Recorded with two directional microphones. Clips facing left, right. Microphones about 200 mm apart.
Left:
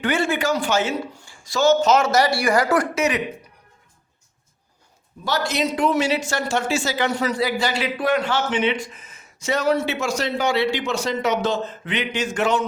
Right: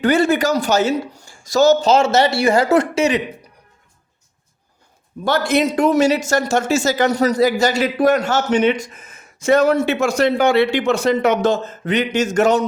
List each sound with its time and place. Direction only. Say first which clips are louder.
0.0 s a man's voice: right 6 dB; 40° right (ahead or behind)
5.2 s a man's voice: right 6 dB; 55° right (ahead or behind)